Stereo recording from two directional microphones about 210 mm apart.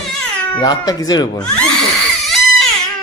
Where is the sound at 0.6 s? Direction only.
20° left (ahead or behind).